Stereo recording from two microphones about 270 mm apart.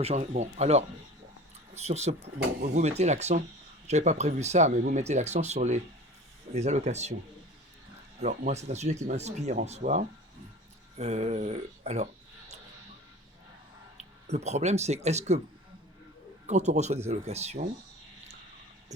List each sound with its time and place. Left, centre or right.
0.0 s speech: right
8.2 s speech: right
13.9 s speech: right
16.5 s speech: right